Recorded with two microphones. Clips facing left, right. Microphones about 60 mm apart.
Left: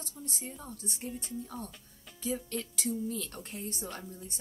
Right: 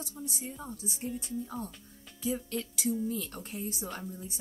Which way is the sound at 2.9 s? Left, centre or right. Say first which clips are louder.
Right 2 dB; centre.